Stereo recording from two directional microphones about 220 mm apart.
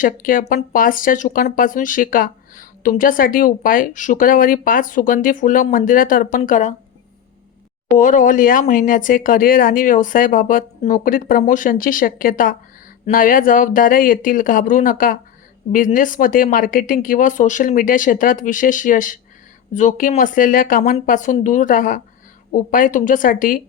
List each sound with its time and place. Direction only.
0.0 s speech: 40° left (ahead or behind)
7.9 s speech: 35° left (ahead or behind)